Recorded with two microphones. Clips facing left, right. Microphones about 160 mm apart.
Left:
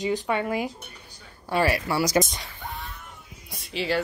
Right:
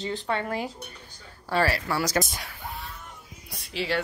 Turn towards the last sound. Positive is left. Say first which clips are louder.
# left 2 dB
turn(degrees=0)  # may be behind; listen again after turning